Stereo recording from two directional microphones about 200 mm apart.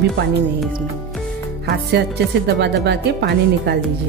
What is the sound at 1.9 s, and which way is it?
Speech, 55° right (ahead or behind).